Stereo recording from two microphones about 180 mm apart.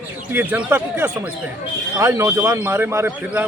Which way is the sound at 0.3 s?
10° right (ahead or behind).